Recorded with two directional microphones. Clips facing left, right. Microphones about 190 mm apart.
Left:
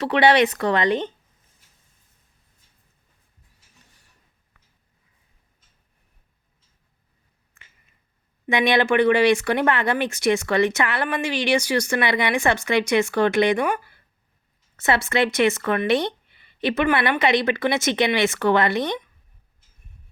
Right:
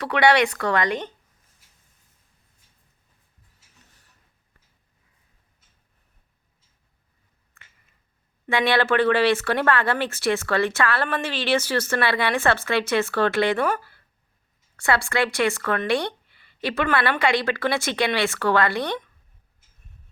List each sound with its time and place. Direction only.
0.0 s speech: 25° left (ahead or behind)
7.6 s a sound: 20° left (ahead or behind)
8.4 s speech: 15° left (ahead or behind)